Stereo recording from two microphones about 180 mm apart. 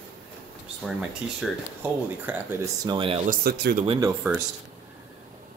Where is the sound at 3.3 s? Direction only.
60° right (ahead or behind).